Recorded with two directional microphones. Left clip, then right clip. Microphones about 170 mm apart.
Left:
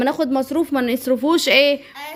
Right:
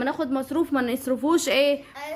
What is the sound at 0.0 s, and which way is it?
Speech, 40° left (ahead or behind).